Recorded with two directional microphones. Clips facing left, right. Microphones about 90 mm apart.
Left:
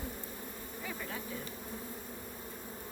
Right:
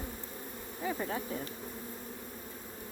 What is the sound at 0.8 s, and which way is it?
Speech, 35° right (ahead or behind).